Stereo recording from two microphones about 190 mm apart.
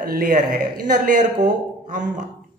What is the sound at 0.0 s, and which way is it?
Speech, 50° right (ahead or behind).